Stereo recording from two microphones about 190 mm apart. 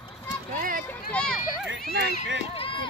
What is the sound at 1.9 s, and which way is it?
Speech, 65° right (ahead or behind).